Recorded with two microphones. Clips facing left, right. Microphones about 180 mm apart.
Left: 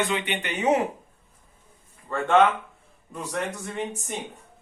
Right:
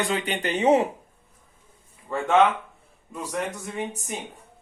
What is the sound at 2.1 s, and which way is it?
Speech, 10° right (ahead or behind).